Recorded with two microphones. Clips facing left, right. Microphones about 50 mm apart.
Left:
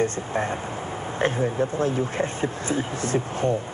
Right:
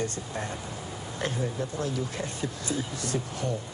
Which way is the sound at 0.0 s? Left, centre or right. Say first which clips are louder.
Left 8 dB; left.